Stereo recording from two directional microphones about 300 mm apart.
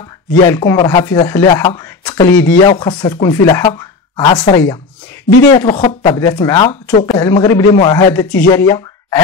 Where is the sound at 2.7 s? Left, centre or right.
Centre.